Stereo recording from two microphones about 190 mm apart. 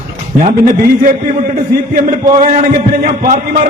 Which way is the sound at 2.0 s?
45° right (ahead or behind).